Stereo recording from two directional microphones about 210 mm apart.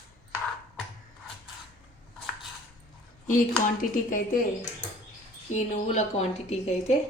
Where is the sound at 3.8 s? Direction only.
40° left (ahead or behind).